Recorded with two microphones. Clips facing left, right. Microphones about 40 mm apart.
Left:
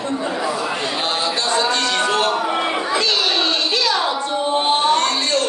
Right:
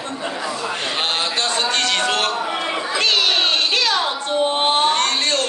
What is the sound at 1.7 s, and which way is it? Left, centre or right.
Music, right.